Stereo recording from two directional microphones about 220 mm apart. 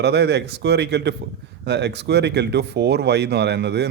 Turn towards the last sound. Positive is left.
turn(degrees=-50)  # may be behind; listen again after turning